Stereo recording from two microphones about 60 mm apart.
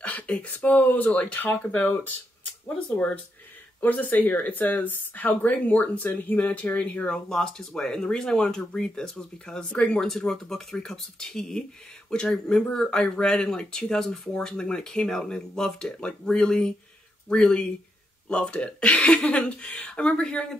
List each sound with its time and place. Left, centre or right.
0.0 s speech: left
3.8 s speech: left
7.2 s speech: centre